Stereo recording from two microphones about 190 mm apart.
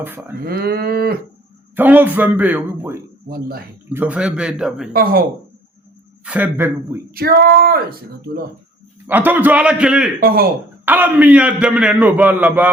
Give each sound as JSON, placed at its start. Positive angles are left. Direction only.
{"t": 0.0, "sound": "a man's voice", "side_deg": -10}
{"t": 0.4, "sound": "cattle", "side_deg": -55}
{"t": 1.7, "sound": "a man's voice", "side_deg": -10}
{"t": 3.2, "sound": "speech", "side_deg": -50}
{"t": 3.8, "sound": "a man's voice", "side_deg": -10}
{"t": 6.2, "sound": "a man's voice", "side_deg": -10}
{"t": 7.1, "sound": "speech", "side_deg": -50}
{"t": 9.0, "sound": "a man's voice", "side_deg": -10}
{"t": 10.2, "sound": "speech", "side_deg": -50}
{"t": 10.8, "sound": "a man's voice", "side_deg": -10}